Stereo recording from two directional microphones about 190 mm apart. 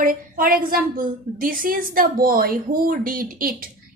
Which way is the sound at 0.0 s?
45° right (ahead or behind).